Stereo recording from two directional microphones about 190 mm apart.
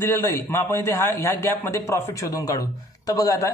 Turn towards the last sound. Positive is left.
turn(degrees=20)  # may be behind; listen again after turning